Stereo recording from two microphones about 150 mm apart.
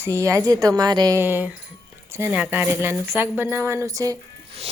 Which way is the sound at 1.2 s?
15° right (ahead or behind).